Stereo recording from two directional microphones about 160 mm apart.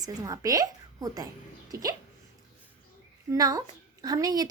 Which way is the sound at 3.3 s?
20° right (ahead or behind).